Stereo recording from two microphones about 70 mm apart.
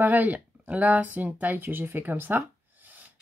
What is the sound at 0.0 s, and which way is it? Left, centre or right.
Speech, right.